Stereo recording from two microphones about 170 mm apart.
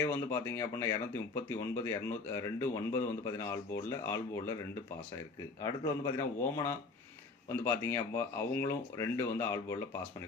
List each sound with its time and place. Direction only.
0.0 s speech: 15° left (ahead or behind)
5.8 s speech: 20° left (ahead or behind)